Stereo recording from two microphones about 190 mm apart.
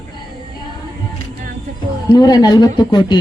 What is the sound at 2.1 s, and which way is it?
Speech, 20° left (ahead or behind).